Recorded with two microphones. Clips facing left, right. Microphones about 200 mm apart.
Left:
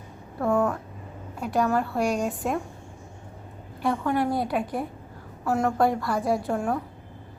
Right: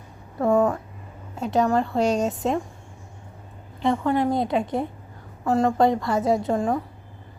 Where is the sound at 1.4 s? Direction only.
20° right (ahead or behind).